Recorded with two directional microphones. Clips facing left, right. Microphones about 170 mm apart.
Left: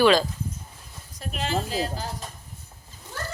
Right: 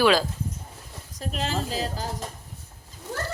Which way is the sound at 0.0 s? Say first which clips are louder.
Left 2 dB; 5° right (ahead or behind).